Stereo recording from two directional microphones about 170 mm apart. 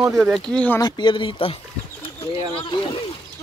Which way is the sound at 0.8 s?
25° left (ahead or behind).